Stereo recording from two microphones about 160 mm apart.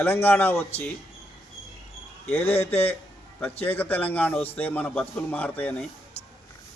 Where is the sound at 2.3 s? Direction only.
15° left (ahead or behind).